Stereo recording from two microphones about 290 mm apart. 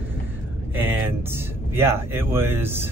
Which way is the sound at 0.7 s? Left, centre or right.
Centre.